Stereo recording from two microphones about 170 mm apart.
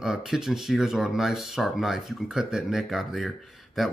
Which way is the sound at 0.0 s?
Centre (ahead or behind).